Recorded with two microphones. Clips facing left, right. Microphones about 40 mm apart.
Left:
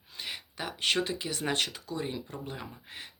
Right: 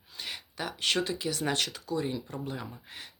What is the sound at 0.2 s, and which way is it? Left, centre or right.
Speech, centre.